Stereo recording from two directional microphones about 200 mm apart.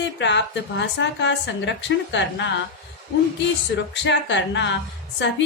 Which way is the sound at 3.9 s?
65° left (ahead or behind).